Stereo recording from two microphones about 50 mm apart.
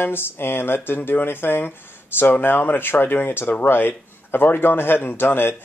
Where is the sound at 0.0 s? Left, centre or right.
Left.